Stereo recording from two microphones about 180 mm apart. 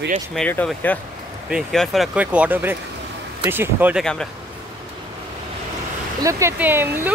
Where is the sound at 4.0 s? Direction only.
5° left (ahead or behind).